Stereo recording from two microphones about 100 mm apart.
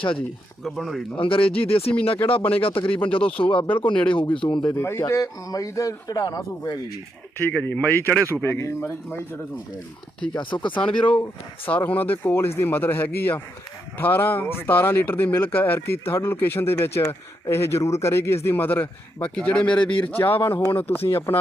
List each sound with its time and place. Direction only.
0.6 s speech: centre (ahead or behind)
1.1 s speech: 65° left (ahead or behind)
2.4 s speech: 15° left (ahead or behind)
2.6 s speech: 65° left (ahead or behind)
4.7 s a man's voice: 25° left (ahead or behind); by 6.7 s 40° left (ahead or behind)
7.3 s a man's voice: 20° left (ahead or behind)
10.3 s speech: 50° left (ahead or behind)
10.7 s a man's voice: 10° left (ahead or behind)